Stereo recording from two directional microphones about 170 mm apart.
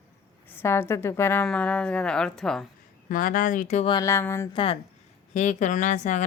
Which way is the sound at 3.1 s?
55° left (ahead or behind).